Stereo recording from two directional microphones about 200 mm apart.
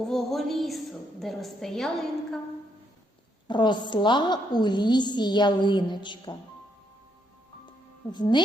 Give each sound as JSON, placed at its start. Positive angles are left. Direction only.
{"t": 0.0, "sound": "a woman's voice", "side_deg": 0}
{"t": 3.4, "sound": "a woman's voice", "side_deg": 25}
{"t": 8.1, "sound": "a woman's voice", "side_deg": 20}